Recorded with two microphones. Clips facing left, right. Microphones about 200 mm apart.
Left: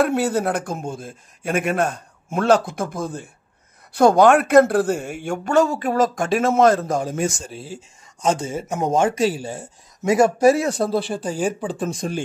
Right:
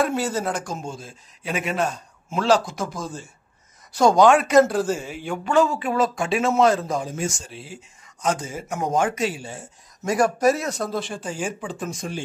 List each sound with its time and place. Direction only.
0.0 s a man's voice: 60° left (ahead or behind); by 9.7 s 40° left (ahead or behind)
10.0 s speech: 25° left (ahead or behind)